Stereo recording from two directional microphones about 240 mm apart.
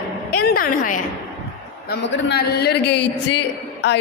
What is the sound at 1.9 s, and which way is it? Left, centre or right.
A man's voice, left.